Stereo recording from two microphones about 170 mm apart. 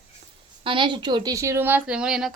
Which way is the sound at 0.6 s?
30° right (ahead or behind).